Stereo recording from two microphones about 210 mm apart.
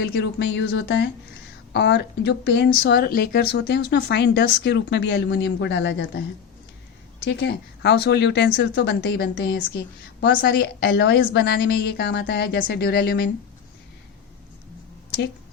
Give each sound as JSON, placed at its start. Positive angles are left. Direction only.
{"t": 0.0, "sound": "speech", "side_deg": 55}
{"t": 7.3, "sound": "speech", "side_deg": 55}